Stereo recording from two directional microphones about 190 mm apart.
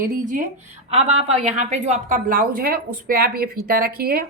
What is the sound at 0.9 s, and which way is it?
A woman's voice, 30° right (ahead or behind).